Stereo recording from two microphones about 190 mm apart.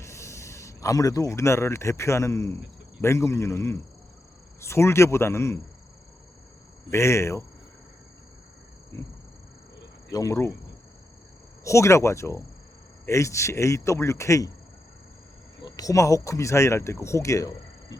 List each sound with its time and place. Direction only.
0.0 s speech: 15° left (ahead or behind)
6.9 s speech: 15° left (ahead or behind)
8.9 s speech: 15° left (ahead or behind)
11.6 s speech: 15° left (ahead or behind)
15.6 s speech: 20° left (ahead or behind)